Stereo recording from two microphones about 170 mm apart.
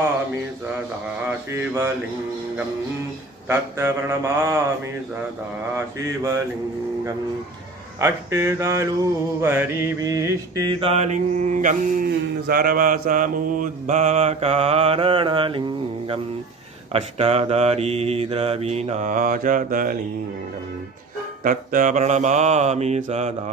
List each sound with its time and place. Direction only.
3.4 s mantra: 15° right (ahead or behind)
8.0 s mantra: 15° right (ahead or behind)
10.8 s mantra: 40° right (ahead or behind)
16.9 s mantra: 35° right (ahead or behind); by 20.0 s 55° right (ahead or behind)
21.5 s mantra: 50° right (ahead or behind)